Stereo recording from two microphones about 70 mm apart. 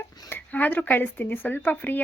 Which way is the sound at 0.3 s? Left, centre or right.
Left.